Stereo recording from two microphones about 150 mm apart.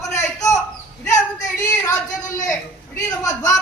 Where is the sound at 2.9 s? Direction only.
25° left (ahead or behind).